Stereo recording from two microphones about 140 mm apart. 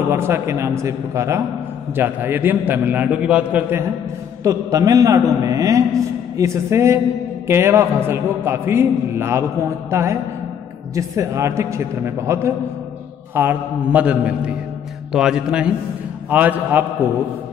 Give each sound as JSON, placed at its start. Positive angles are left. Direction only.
{"t": 0.1, "sound": "a man's voice", "side_deg": -20}
{"t": 4.4, "sound": "a man's voice", "side_deg": -25}